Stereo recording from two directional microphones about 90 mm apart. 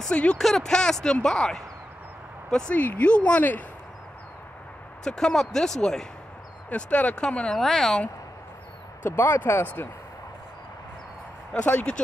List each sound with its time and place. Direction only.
0.0 s speech: 10° left (ahead or behind)
5.0 s speech: 5° left (ahead or behind)
9.0 s speech: 25° left (ahead or behind)
11.5 s speech: 15° left (ahead or behind)